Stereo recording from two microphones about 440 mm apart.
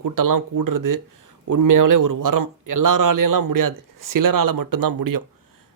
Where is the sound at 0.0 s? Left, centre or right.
Right.